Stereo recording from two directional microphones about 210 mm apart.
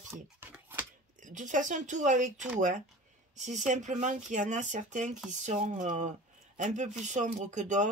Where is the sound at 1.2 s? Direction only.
35° right (ahead or behind).